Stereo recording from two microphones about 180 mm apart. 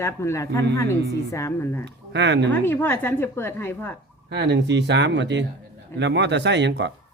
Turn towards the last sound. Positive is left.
turn(degrees=-75)  # may be behind; listen again after turning